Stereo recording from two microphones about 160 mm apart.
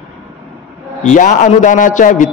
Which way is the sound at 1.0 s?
50° left (ahead or behind).